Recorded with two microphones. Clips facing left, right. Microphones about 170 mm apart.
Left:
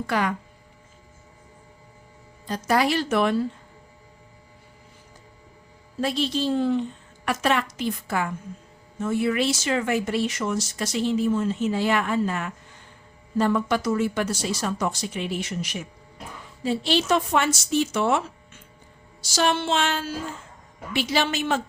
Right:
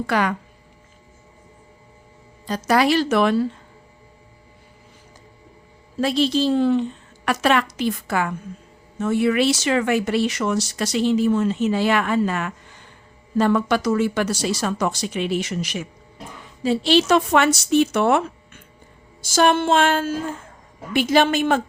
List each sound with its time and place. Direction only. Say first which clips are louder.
0.1 s speech: right 3 dB; 75° right (ahead or behind)
2.5 s speech: right 4 dB; 80° right
6.0 s a woman's voice: right 5 dB; 90° right
16.6 s speech: right 5 dB; 80° right; by 21.6 s 55° right (ahead or behind)